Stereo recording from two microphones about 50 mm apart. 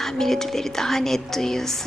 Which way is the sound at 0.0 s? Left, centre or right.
Centre.